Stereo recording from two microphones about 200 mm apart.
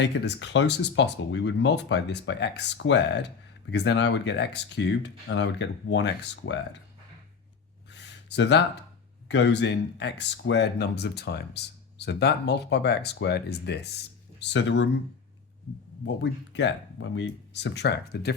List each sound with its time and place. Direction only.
0.0 s speech: 60° left (ahead or behind)
7.9 s a sound: 60° left (ahead or behind)
9.3 s speech: 60° left (ahead or behind)
16.0 s speech: 60° left (ahead or behind)